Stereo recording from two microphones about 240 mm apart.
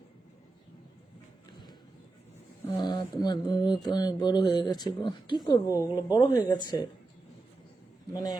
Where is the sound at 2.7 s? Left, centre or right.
Centre.